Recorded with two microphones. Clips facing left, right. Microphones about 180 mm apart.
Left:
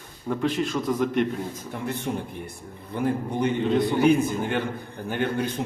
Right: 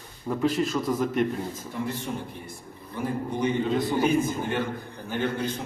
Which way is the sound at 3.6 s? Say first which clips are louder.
Left 3 dB; centre (ahead or behind).